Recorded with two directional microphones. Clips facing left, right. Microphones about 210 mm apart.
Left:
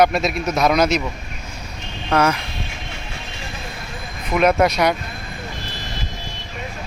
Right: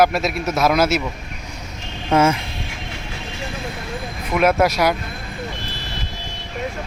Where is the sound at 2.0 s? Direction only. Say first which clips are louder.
Right 2 dB; 25° right (ahead or behind).